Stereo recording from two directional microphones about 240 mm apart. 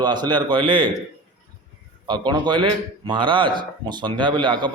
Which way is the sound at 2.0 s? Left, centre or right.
Centre.